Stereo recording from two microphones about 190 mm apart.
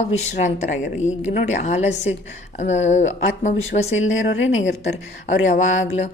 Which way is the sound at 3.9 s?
90° left.